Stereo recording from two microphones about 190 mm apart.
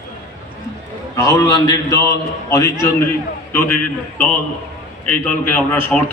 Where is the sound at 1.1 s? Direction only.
15° left (ahead or behind).